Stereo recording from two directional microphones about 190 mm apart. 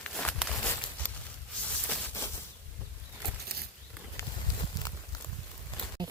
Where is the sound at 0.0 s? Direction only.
5° left (ahead or behind).